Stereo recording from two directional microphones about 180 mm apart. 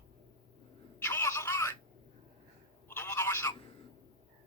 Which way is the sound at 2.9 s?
15° left (ahead or behind).